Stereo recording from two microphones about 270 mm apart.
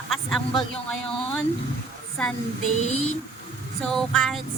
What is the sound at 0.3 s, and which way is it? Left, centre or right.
Speech, centre.